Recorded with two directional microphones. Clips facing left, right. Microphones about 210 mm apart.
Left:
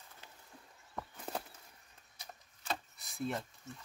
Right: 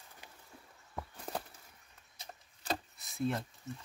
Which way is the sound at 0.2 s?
15° right (ahead or behind).